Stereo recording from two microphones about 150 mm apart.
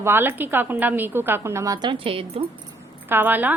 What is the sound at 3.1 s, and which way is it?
Speech, 15° right (ahead or behind).